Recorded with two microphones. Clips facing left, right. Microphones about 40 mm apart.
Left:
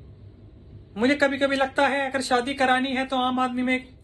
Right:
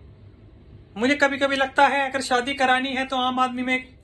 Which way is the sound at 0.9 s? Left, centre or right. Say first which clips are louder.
Right 1 dB; right.